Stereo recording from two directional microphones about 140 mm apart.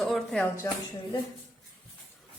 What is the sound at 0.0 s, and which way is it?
Speech, centre (ahead or behind).